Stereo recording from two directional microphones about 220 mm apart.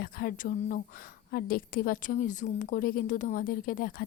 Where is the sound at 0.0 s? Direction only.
40° left (ahead or behind).